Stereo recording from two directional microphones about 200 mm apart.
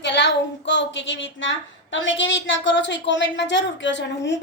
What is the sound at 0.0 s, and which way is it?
Speech, 60° left (ahead or behind).